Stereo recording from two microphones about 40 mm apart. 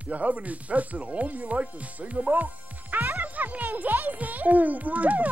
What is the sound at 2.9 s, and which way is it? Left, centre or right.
A child's voice, right.